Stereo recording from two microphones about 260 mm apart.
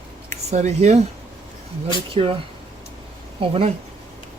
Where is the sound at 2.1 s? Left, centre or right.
Right.